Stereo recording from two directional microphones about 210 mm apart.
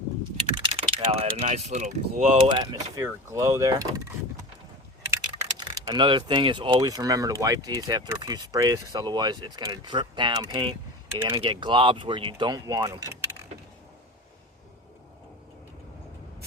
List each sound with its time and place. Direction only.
0.6 s speech: 25° right (ahead or behind)
5.1 s speech: 20° right (ahead or behind)